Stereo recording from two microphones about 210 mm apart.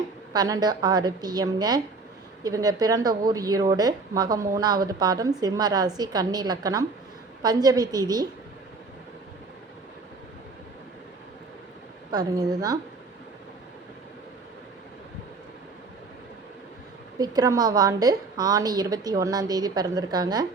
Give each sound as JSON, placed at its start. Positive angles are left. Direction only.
{"t": 0.3, "sound": "a woman's voice", "side_deg": -20}
{"t": 12.1, "sound": "a woman's voice", "side_deg": -20}
{"t": 17.2, "sound": "a woman's voice", "side_deg": -20}